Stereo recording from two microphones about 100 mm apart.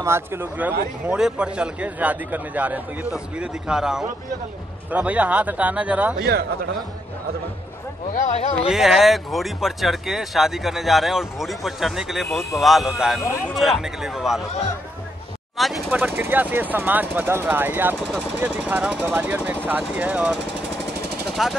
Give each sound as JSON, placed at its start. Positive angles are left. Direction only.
{"t": 0.0, "sound": "a man's voice", "side_deg": -25}
{"t": 8.6, "sound": "speech", "side_deg": -5}
{"t": 15.5, "sound": "speech", "side_deg": 0}
{"t": 15.9, "sound": "speech", "side_deg": -20}
{"t": 17.9, "sound": "a man's voice", "side_deg": -10}
{"t": 21.3, "sound": "vehicle", "side_deg": -5}